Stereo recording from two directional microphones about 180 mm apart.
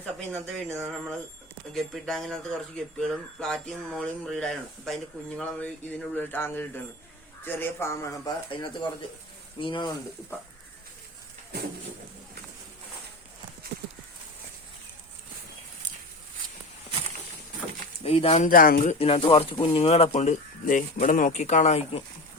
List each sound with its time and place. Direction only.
0.0 s speech: 5° left (ahead or behind)
8.4 s speech: 25° left (ahead or behind)
13.7 s clip-clop: 60° right (ahead or behind)
18.0 s speech: 35° left (ahead or behind)